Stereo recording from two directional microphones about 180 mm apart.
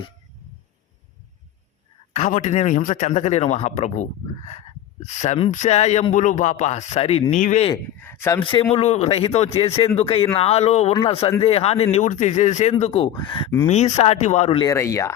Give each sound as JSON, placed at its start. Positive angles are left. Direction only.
{"t": 2.1, "sound": "speech", "side_deg": 40}
{"t": 7.3, "sound": "speech", "side_deg": 45}
{"t": 7.9, "sound": "speech", "side_deg": 10}
{"t": 8.4, "sound": "speech", "side_deg": 30}
{"t": 13.7, "sound": "speech", "side_deg": 35}
{"t": 14.6, "sound": "speech", "side_deg": 15}